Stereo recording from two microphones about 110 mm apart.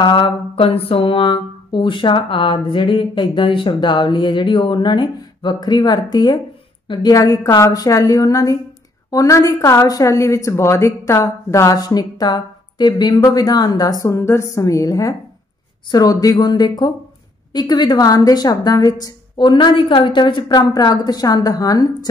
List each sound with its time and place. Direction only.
0.0 s mantra: 45° left (ahead or behind)
6.9 s a woman's voice: 40° left (ahead or behind)
14.0 s a woman's voice: 25° left (ahead or behind)